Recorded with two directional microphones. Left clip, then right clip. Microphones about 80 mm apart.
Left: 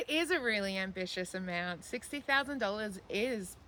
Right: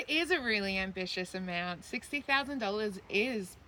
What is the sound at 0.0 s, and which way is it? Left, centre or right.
Speech, left.